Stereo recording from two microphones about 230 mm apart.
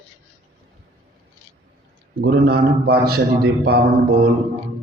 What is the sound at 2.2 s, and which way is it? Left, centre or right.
A man's voice, right.